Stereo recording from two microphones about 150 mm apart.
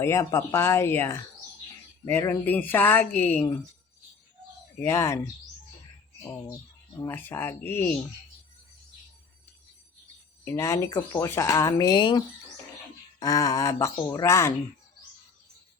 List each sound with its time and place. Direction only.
0.0 s speech: 20° left (ahead or behind)
4.8 s speech: 20° left (ahead or behind)
7.0 s speech: 15° left (ahead or behind)
10.4 s speech: 20° left (ahead or behind)